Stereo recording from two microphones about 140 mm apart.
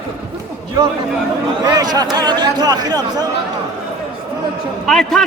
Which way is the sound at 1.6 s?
30° right (ahead or behind).